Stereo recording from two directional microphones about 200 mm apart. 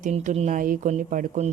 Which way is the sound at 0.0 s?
40° right (ahead or behind).